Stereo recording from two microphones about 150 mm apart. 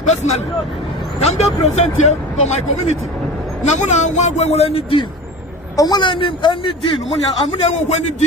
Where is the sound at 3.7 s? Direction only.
50° left (ahead or behind); by 6.7 s 30° left (ahead or behind).